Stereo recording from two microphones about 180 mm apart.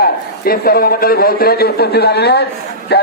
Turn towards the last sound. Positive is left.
turn(degrees=65)  # may be behind; listen again after turning